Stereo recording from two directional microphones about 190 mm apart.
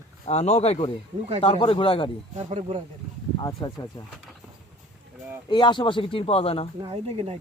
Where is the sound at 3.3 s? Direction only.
20° left (ahead or behind).